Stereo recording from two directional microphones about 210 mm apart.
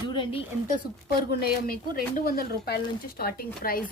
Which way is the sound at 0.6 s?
45° left (ahead or behind).